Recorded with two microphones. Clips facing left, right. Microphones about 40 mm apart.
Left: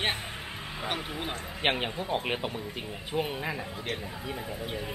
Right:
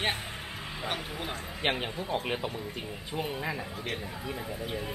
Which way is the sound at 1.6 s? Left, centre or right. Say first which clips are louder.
Left 2 dB; left.